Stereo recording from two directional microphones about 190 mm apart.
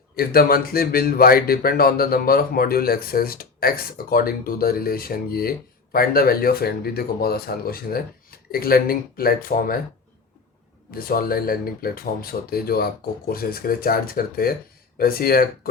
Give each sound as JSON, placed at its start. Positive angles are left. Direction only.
{"t": 0.2, "sound": "speech", "side_deg": 55}
{"t": 10.9, "sound": "speech", "side_deg": 50}